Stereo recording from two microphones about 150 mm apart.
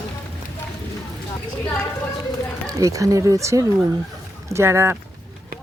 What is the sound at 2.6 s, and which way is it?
Speech, 20° right (ahead or behind).